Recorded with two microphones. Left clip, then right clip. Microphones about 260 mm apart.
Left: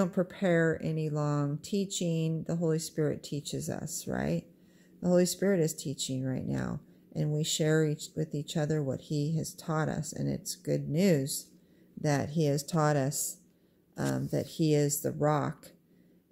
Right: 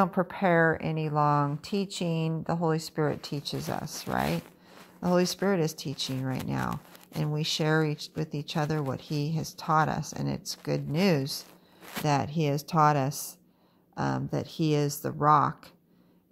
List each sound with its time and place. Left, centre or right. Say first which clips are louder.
0.0 s speech: right 4 dB; centre